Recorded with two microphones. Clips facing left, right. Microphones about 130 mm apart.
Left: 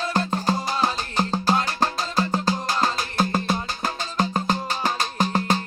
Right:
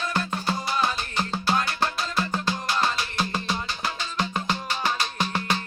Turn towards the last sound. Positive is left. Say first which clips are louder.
# left 5 dB
turn(degrees=40)  # may be behind; listen again after turning